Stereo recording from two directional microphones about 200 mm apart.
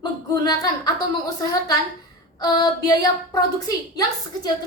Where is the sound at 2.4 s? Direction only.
20° left (ahead or behind).